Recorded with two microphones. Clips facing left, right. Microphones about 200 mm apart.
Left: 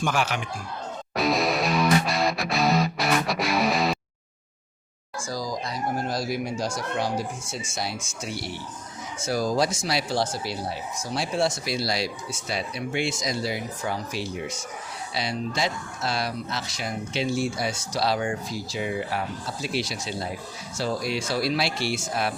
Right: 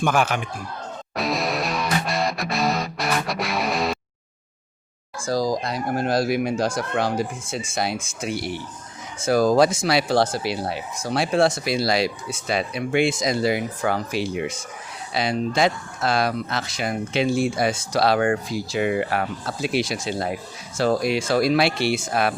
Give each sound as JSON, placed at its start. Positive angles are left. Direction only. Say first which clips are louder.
{"t": 0.0, "sound": "speech", "louder": "right 5 dB", "side_deg": -50}
{"t": 1.1, "sound": "music", "louder": "left 1 dB", "side_deg": 0}
{"t": 5.2, "sound": "speech", "louder": "right 8 dB", "side_deg": -70}